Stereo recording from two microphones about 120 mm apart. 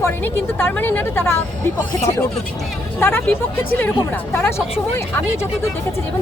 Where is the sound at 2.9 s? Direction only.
20° left (ahead or behind).